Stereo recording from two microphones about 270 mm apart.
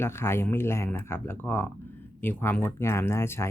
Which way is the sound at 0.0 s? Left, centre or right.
Centre.